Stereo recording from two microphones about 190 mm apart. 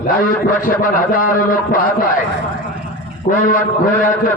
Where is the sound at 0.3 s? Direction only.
45° left (ahead or behind).